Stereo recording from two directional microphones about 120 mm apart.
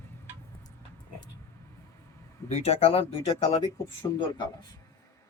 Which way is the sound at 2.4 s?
65° left (ahead or behind).